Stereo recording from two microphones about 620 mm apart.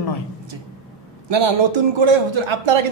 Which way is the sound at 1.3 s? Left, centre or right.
Right.